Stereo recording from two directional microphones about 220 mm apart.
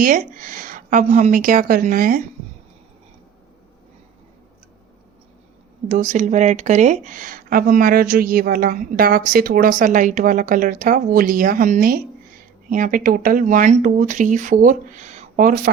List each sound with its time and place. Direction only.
0.0 s speech: 40° right (ahead or behind)
5.9 s speech: 35° right (ahead or behind)